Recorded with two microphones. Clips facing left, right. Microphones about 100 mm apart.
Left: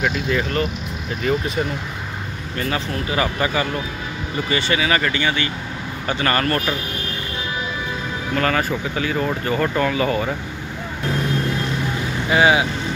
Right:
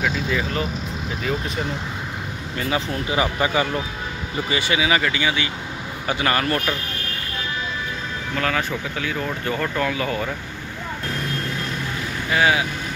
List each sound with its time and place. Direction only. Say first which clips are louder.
0.0 s speech: left 2 dB; 5° right (ahead or behind)
2.7 s speech: right 1 dB; 15° right (ahead or behind)
8.4 s speech: left 3 dB; centre (ahead or behind)
12.3 s speech: left 4 dB; 20° left (ahead or behind)